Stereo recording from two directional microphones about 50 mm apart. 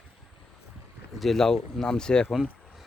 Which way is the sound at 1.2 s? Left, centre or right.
Centre.